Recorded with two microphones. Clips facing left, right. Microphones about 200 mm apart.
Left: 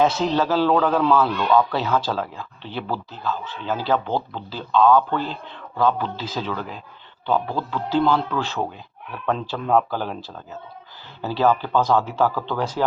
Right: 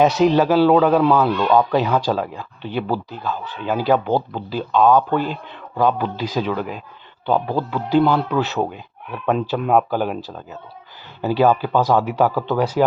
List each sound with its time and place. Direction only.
0.0 s a man's voice: 15° right (ahead or behind)